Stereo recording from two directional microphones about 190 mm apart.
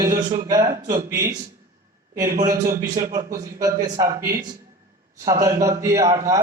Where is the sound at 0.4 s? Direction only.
20° right (ahead or behind).